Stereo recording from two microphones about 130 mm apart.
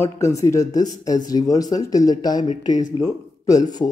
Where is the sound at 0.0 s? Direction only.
25° left (ahead or behind).